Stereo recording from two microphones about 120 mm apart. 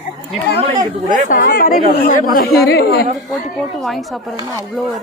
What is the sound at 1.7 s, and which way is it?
Speech, 90° left.